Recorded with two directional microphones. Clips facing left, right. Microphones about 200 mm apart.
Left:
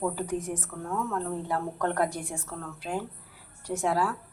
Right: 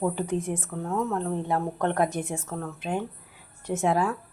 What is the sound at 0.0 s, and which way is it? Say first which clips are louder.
A woman's voice: right 3 dB; 25° right (ahead or behind).